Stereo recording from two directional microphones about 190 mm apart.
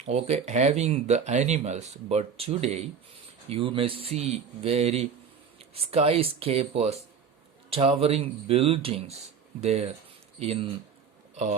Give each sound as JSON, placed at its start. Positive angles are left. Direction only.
{"t": 0.0, "sound": "speech", "side_deg": -35}